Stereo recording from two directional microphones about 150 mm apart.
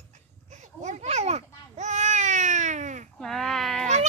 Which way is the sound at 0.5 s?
50° right (ahead or behind).